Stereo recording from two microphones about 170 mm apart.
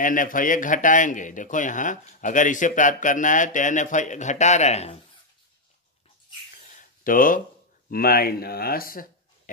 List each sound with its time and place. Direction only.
0.0 s a man's voice: 50° left (ahead or behind)
6.7 s a sound: 55° left (ahead or behind)
7.9 s speech: 60° left (ahead or behind)